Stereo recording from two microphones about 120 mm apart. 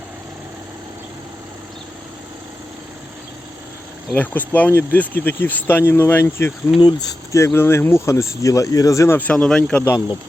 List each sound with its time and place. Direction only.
4.1 s speech: 15° left (ahead or behind)
6.7 s speech: 35° left (ahead or behind); by 9.8 s 5° left (ahead or behind)